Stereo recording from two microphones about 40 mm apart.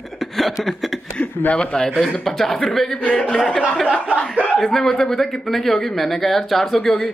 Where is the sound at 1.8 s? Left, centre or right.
Centre.